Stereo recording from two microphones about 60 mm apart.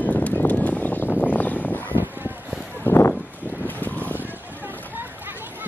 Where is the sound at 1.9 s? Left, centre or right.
Right.